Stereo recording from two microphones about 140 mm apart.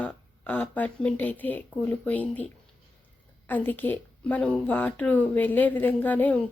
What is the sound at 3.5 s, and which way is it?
A woman's voice, 10° left (ahead or behind).